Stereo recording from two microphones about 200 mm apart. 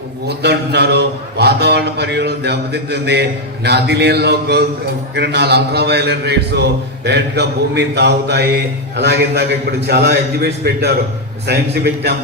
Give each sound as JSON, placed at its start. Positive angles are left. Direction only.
{"t": 0.3, "sound": "a man's voice", "side_deg": -55}